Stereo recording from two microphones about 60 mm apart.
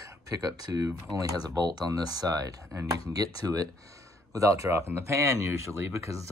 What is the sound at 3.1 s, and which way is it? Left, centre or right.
Speech, right.